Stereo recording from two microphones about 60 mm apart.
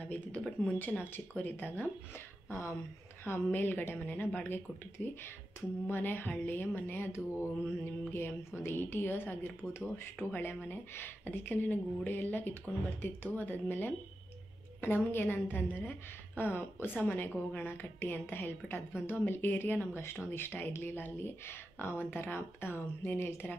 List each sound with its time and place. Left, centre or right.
0.0 s speech: left
2.5 s a woman's voice: left
3.3 s speech: left
17.6 s speech: left
20.0 s speech: left